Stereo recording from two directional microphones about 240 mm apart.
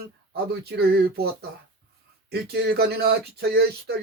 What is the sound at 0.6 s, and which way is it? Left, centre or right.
Speech, right.